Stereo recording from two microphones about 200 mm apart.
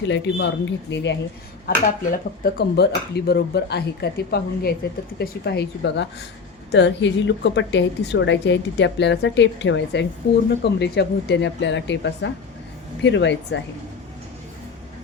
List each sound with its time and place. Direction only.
0.1 s a woman's voice: 65° left (ahead or behind)
1.6 s a woman's voice: 50° left (ahead or behind)